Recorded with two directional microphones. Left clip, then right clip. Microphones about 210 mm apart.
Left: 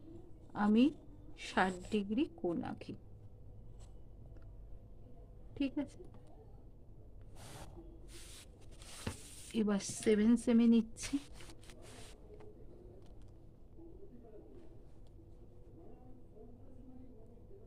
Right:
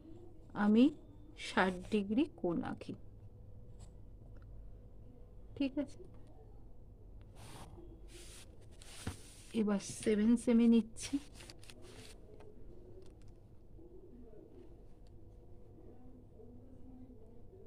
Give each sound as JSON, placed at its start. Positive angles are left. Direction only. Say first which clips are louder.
{"t": 0.5, "sound": "a woman's voice", "louder": "right 1 dB", "side_deg": -15}
{"t": 5.5, "sound": "a woman's voice", "louder": "right 1 dB", "side_deg": -10}
{"t": 9.6, "sound": "a woman's voice", "louder": "even", "side_deg": 0}